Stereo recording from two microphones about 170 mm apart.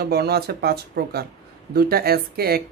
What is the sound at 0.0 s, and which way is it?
Speech, 70° right (ahead or behind).